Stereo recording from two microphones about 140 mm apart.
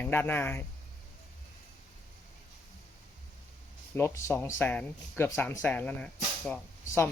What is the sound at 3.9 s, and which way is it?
Speech, 15° left (ahead or behind).